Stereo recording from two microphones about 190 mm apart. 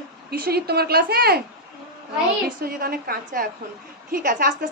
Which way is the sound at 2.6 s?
50° right (ahead or behind).